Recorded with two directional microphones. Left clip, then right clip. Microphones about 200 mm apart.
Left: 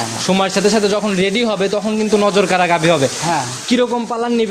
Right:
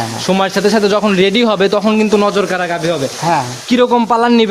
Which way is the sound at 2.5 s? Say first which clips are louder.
Left 3 dB; 20° left (ahead or behind).